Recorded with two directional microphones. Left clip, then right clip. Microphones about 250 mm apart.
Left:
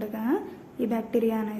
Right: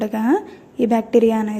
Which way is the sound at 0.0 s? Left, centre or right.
Right.